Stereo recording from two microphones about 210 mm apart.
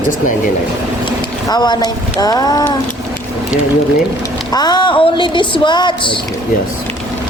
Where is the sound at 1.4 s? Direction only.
20° left (ahead or behind).